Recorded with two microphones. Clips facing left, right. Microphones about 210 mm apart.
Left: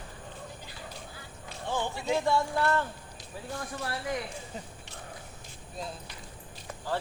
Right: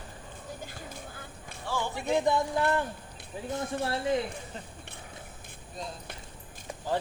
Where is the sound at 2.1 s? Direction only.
20° right (ahead or behind).